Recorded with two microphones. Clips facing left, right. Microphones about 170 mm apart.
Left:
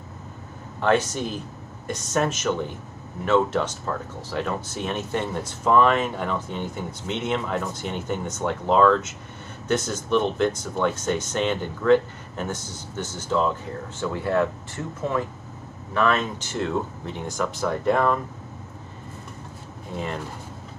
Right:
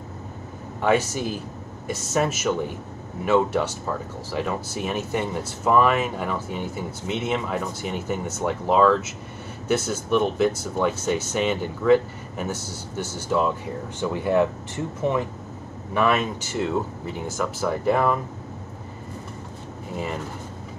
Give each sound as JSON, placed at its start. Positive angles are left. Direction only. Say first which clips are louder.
{"t": 0.7, "sound": "speech", "louder": "even", "side_deg": -10}
{"t": 15.9, "sound": "speech", "louder": "right 1 dB", "side_deg": -10}